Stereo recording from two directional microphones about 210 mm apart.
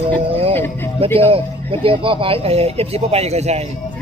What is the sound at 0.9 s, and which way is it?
A man's voice, 25° right (ahead or behind).